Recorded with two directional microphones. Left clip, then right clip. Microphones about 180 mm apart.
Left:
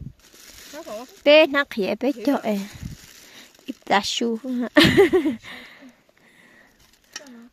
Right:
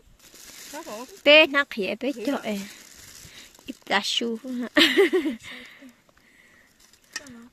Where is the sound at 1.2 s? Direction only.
15° left (ahead or behind).